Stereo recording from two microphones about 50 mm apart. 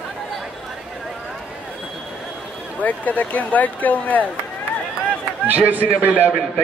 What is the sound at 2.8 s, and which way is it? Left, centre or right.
Speech, left.